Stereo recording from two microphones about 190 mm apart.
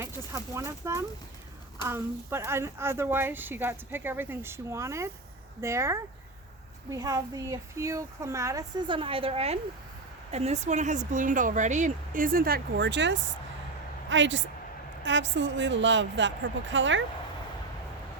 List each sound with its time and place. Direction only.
0.0 s speech: 15° right (ahead or behind); by 17.0 s 75° right (ahead or behind)